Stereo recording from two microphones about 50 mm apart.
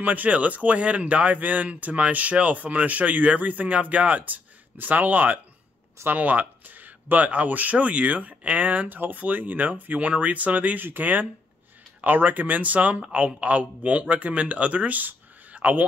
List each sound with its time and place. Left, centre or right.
0.0 s speech: right